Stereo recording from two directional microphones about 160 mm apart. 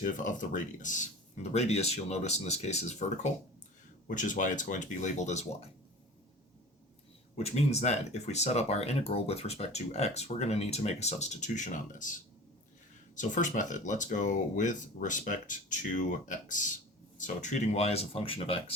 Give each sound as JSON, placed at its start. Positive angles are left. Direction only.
{"t": 0.0, "sound": "speech", "side_deg": 55}
{"t": 7.3, "sound": "speech", "side_deg": 40}
{"t": 13.1, "sound": "speech", "side_deg": 50}